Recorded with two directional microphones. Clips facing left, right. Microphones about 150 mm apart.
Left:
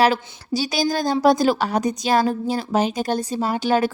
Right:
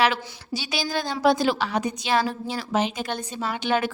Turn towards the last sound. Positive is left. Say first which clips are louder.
# left 5 dB
turn(degrees=40)  # may be behind; listen again after turning